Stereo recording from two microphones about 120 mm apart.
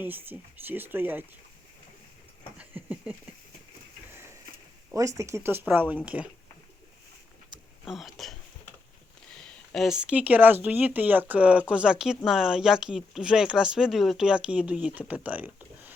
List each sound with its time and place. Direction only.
0.0 s speech: 15° right (ahead or behind)
2.6 s speech: 10° right (ahead or behind)
4.9 s speech: 25° right (ahead or behind)
7.9 s speech: centre (ahead or behind)